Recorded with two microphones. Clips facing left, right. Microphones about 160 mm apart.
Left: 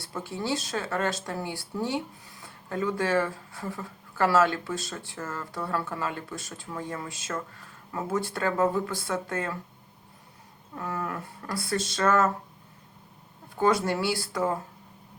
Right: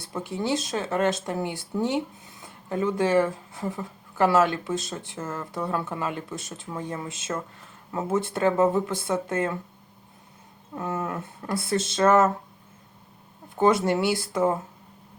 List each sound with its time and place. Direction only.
0.0 s speech: 20° right (ahead or behind)
10.8 s speech: 20° right (ahead or behind)
13.6 s speech: 20° right (ahead or behind)